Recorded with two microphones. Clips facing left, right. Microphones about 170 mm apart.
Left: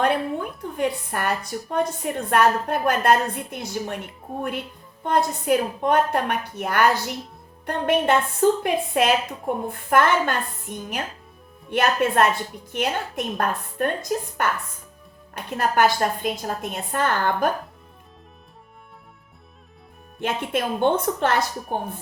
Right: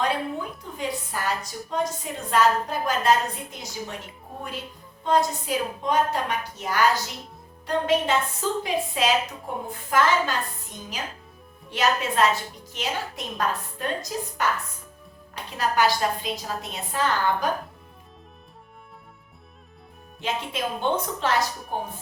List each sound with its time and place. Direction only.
0.0 s a woman's voice: 60° left (ahead or behind)
20.2 s a woman's voice: 55° left (ahead or behind)